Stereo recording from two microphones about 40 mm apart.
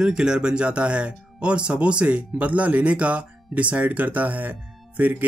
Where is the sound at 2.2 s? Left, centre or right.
Right.